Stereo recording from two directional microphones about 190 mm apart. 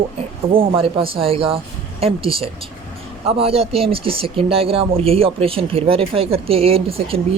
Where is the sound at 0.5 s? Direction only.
30° right (ahead or behind).